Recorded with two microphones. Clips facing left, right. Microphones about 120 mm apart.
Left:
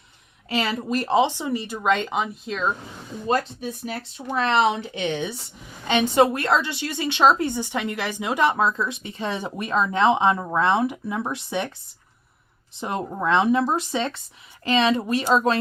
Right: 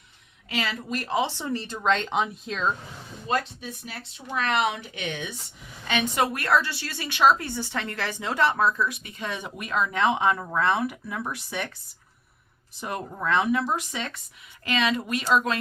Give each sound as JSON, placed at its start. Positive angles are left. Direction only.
{"t": 0.5, "sound": "speech", "side_deg": 30}
{"t": 1.3, "sound": "speech", "side_deg": 15}
{"t": 3.2, "sound": "speech", "side_deg": 40}
{"t": 4.4, "sound": "a woman's voice", "side_deg": 30}
{"t": 12.8, "sound": "a woman's voice", "side_deg": 25}